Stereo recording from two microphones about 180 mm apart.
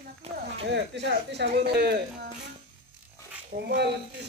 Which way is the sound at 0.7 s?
70° right (ahead or behind).